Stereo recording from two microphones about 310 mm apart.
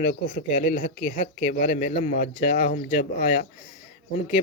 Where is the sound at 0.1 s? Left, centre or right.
Left.